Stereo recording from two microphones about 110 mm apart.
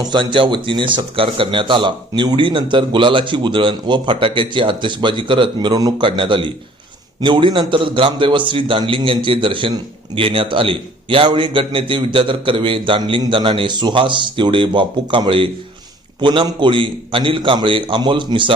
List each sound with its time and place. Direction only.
0.1 s a man's voice: 50° right (ahead or behind)